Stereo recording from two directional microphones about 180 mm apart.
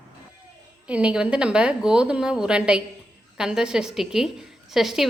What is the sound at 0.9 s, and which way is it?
Speech, 5° right (ahead or behind).